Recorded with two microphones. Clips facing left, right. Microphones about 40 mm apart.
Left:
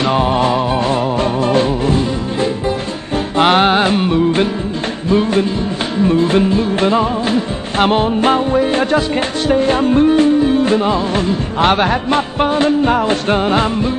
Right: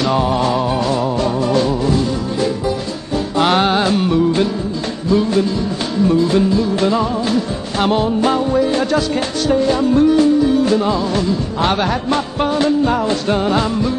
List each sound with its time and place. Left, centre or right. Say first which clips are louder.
0.0 s music: left 2 dB; left